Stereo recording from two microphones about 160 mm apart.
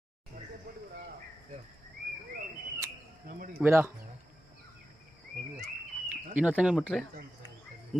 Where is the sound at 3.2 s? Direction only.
65° right (ahead or behind).